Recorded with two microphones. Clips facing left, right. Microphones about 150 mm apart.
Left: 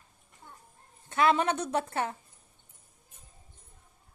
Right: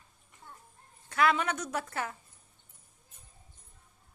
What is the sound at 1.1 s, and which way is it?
A woman's voice, 25° left (ahead or behind).